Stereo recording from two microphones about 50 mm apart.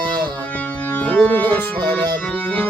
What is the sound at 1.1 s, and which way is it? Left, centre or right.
Music, left.